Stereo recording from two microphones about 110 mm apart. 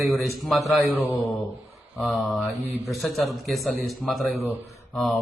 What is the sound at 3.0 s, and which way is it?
A man's voice, centre (ahead or behind).